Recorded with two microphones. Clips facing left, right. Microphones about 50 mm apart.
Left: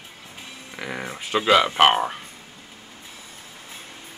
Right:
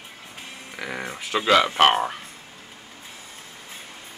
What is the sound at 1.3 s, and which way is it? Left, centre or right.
Speech, centre.